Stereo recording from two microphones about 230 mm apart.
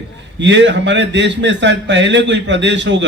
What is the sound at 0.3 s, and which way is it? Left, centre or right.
Speech, right.